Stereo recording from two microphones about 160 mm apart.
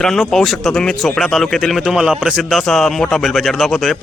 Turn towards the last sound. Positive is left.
turn(degrees=0)  # may be behind; listen again after turning